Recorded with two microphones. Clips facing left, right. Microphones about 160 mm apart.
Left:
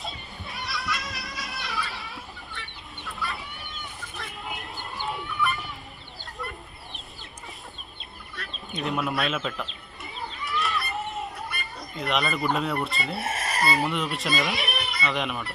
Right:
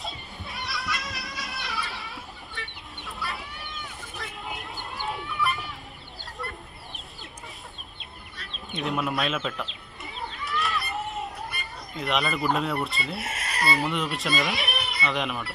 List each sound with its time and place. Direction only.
0.0 s children playing: centre (ahead or behind)
3.0 s chicken: centre (ahead or behind)
4.2 s music: centre (ahead or behind)
5.0 s a sound: centre (ahead or behind)
8.7 s chicken: centre (ahead or behind)
11.9 s speech: centre (ahead or behind)
13.2 s chicken: 50° left (ahead or behind)
13.7 s speech: centre (ahead or behind)